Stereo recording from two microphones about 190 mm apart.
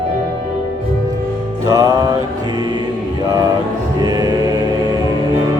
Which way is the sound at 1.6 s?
20° right (ahead or behind).